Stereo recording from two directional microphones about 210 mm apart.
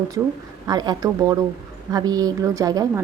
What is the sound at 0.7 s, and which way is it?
A woman's voice, 20° right (ahead or behind).